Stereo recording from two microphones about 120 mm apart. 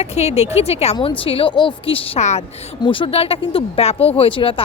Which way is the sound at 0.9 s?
50° left (ahead or behind).